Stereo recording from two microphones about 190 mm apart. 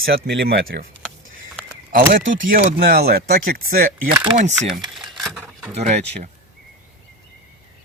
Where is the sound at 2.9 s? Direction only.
55° right (ahead or behind).